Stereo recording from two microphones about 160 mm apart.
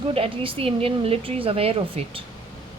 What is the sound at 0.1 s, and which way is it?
Speech, 35° right (ahead or behind).